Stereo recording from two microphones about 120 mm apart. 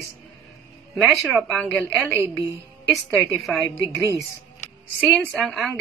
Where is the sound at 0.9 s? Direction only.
5° right (ahead or behind).